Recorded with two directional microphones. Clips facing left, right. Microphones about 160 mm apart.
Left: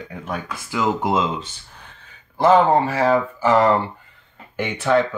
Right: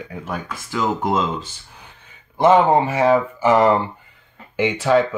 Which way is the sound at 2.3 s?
15° right (ahead or behind).